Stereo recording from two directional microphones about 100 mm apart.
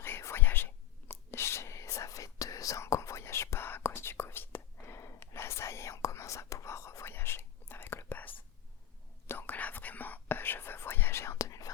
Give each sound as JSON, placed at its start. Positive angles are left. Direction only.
{"t": 0.0, "sound": "whispering", "side_deg": 25}